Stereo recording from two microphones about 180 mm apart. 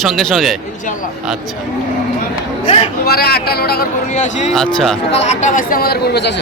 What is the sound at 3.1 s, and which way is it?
A man's voice, 60° left (ahead or behind).